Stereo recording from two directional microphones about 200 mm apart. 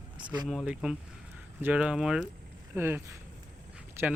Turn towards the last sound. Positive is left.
turn(degrees=-10)  # may be behind; listen again after turning